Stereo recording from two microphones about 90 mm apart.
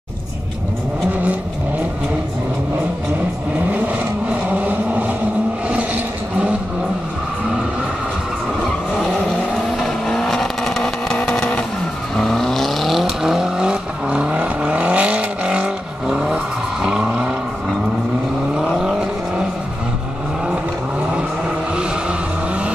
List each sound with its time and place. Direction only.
4.6 s vehicle: 15° right (ahead or behind)
9.8 s vehicle: 5° left (ahead or behind); by 17.3 s 10° right (ahead or behind)
18.8 s vehicle: 10° right (ahead or behind)